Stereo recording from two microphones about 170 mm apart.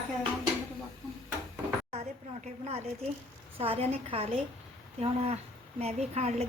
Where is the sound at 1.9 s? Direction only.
40° right (ahead or behind).